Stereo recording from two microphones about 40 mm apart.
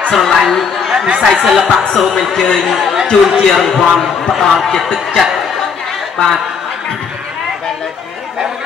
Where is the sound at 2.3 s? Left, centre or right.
Centre.